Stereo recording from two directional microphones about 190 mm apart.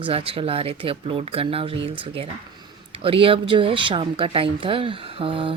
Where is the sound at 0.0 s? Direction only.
30° right (ahead or behind).